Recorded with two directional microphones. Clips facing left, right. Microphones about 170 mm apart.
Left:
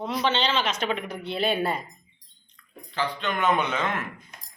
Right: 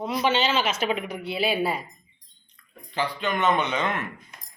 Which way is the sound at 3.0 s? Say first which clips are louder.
Right 1 dB; 15° right (ahead or behind).